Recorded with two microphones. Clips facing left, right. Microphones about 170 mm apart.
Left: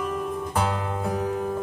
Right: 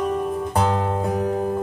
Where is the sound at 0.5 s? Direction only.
35° right (ahead or behind).